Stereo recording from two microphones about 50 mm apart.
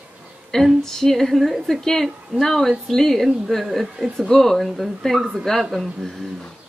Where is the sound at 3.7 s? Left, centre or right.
Centre.